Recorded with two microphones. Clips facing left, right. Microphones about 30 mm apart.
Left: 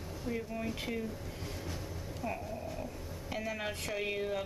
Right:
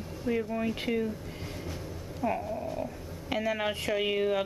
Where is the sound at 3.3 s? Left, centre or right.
Right.